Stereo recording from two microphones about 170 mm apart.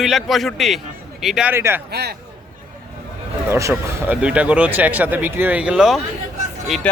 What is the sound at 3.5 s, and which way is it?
Speech, 15° right (ahead or behind).